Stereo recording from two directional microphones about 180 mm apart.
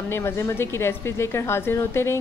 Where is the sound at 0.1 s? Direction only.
15° left (ahead or behind).